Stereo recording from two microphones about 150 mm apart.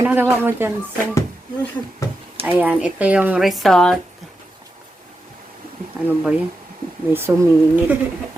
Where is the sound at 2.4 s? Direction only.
10° right (ahead or behind); by 3.9 s 5° left (ahead or behind).